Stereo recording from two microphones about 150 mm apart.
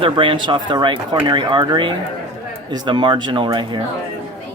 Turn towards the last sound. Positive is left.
turn(degrees=-35)  # may be behind; listen again after turning